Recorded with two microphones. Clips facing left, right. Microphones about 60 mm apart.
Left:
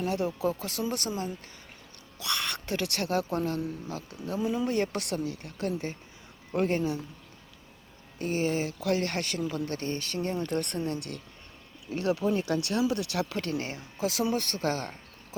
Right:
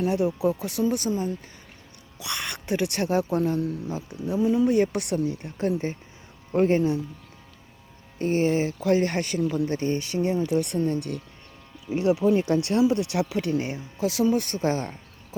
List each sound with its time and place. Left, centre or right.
0.1 s speech: centre
2.1 s speech: centre
3.2 s speech: centre
3.8 s speech: centre
4.4 s speech: centre; by 7.0 s right
8.2 s speech: right; by 10.2 s centre
10.3 s speech: centre
11.9 s speech: centre
13.2 s speech: centre
14.4 s speech: centre